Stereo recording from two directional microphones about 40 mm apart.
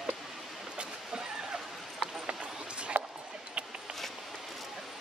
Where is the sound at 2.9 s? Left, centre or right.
Right.